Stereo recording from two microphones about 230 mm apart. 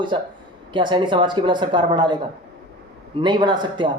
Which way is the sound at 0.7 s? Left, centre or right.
Right.